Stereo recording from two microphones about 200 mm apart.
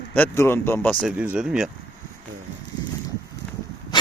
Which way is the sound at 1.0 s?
5° right (ahead or behind).